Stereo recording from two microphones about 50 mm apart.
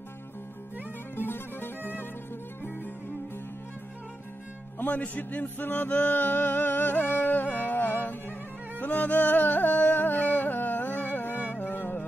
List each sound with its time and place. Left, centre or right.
1.1 s music: left
4.7 s music: left